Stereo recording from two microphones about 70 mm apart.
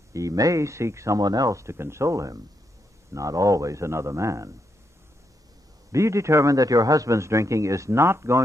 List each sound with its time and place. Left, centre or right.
0.1 s a man's voice: right
1.2 s a man's voice: right
5.9 s a man's voice: right